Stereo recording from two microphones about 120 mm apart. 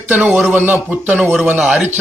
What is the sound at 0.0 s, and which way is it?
A man's voice, 10° right (ahead or behind).